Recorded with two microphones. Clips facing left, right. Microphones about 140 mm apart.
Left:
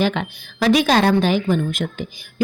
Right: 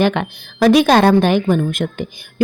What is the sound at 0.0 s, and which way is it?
A woman's voice, 60° right (ahead or behind).